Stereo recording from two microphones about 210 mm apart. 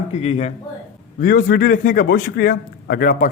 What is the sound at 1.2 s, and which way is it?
A man's voice, 40° left (ahead or behind).